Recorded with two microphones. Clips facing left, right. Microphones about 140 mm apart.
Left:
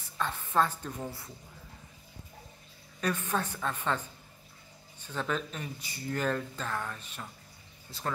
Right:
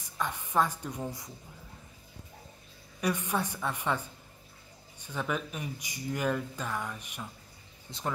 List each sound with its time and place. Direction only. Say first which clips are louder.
0.0 s speech: even; 15° right (ahead or behind)
3.0 s speech: right 1 dB; 15° right (ahead or behind)